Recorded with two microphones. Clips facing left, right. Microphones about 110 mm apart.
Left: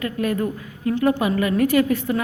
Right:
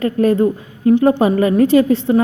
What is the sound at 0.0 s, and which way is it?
A woman's voice, 30° right (ahead or behind).